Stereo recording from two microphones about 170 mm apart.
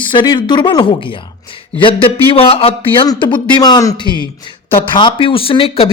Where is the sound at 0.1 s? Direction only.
25° left (ahead or behind).